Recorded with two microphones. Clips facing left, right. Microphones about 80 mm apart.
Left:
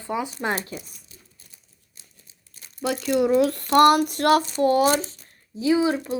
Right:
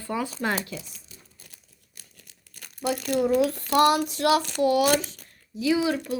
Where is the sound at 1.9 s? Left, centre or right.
Right.